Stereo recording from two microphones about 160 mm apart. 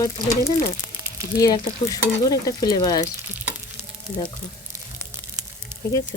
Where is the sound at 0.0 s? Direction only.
20° left (ahead or behind).